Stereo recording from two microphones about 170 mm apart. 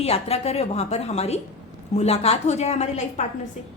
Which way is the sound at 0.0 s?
35° left (ahead or behind).